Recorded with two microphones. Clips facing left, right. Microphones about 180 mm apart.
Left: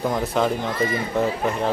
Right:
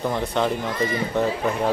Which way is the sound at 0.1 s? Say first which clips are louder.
Left 1 dB; centre (ahead or behind).